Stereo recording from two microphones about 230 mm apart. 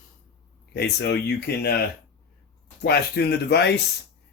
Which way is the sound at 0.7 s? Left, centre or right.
Left.